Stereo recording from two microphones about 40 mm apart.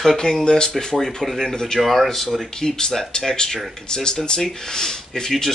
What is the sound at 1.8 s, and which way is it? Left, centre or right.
Speech, centre.